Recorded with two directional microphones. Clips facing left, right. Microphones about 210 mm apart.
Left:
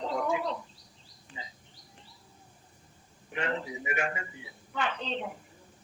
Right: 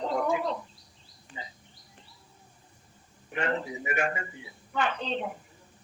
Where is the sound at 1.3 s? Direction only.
50° right (ahead or behind).